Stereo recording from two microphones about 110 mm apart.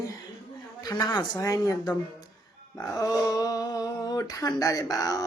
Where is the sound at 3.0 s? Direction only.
35° left (ahead or behind).